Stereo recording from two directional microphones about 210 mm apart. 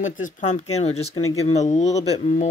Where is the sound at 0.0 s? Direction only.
35° left (ahead or behind).